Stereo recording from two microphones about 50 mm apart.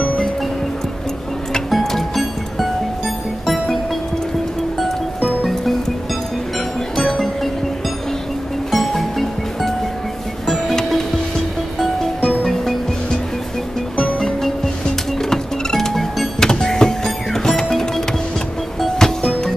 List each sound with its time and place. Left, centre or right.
1.7 s music: centre
7.0 s music: centre
8.7 s music: centre
13.9 s music: centre
14.2 s music: centre